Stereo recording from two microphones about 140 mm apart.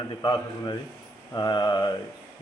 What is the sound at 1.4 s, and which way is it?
Mantra, 30° left (ahead or behind).